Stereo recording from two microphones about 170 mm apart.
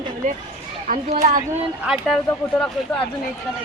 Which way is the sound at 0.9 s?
55° right (ahead or behind).